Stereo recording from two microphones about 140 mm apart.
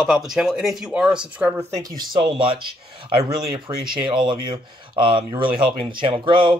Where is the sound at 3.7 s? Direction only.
25° right (ahead or behind).